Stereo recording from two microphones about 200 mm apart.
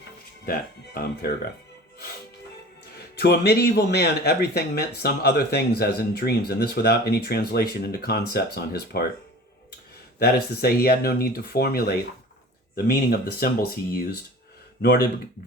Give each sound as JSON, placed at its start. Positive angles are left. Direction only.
{"t": 2.9, "sound": "speech", "side_deg": 55}
{"t": 10.2, "sound": "speech", "side_deg": 50}